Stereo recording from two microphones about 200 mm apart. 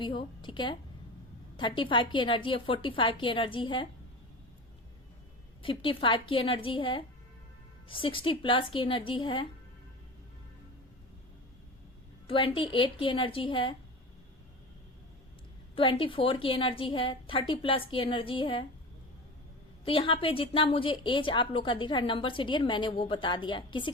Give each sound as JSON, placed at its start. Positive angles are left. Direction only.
{"t": 0.0, "sound": "a woman's voice", "side_deg": 25}
{"t": 5.6, "sound": "a woman's voice", "side_deg": 25}
{"t": 12.3, "sound": "a woman's voice", "side_deg": 25}
{"t": 15.7, "sound": "a woman's voice", "side_deg": 25}
{"t": 19.8, "sound": "a woman's voice", "side_deg": 25}